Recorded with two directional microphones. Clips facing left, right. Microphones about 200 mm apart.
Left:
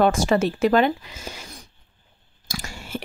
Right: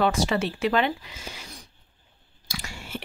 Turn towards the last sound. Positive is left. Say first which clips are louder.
# left 4 dB
turn(degrees=45)  # may be behind; listen again after turning